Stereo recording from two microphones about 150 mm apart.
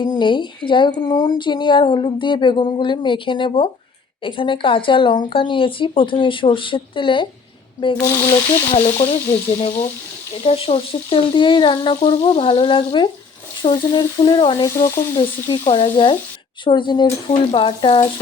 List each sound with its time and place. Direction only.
0.0 s speech: 30° left (ahead or behind)
8.0 s speech: 20° left (ahead or behind)
8.7 s frying: 45° left (ahead or behind)
9.5 s speech: 40° left (ahead or behind); by 15.5 s 20° left (ahead or behind)
15.7 s speech: 35° left (ahead or behind)